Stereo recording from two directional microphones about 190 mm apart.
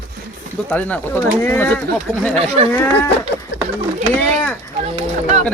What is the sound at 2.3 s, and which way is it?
Speech, 30° right (ahead or behind).